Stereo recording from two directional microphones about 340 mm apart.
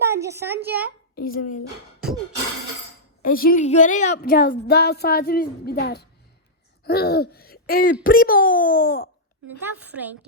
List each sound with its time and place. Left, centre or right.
0.0 s a woman's voice: centre
1.1 s female singing: left
3.2 s female singing: left
6.8 s speech: left
8.0 s female singing: left
9.5 s a woman's voice: centre